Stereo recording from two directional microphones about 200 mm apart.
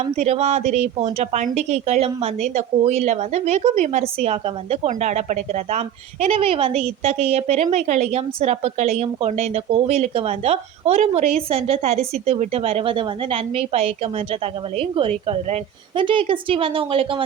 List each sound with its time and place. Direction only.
0.0 s a woman's voice: 30° right (ahead or behind)